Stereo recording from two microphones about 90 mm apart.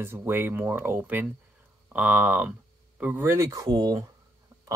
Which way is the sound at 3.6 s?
45° right (ahead or behind).